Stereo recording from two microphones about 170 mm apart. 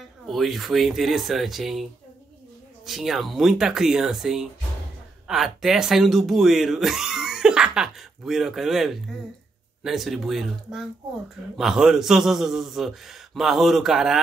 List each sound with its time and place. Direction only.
0.3 s speech: centre (ahead or behind)
2.9 s speech: centre (ahead or behind)